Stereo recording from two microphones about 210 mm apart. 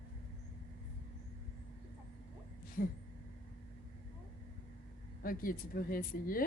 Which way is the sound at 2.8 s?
45° left (ahead or behind).